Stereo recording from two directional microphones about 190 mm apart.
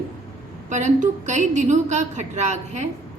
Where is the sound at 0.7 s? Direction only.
40° right (ahead or behind).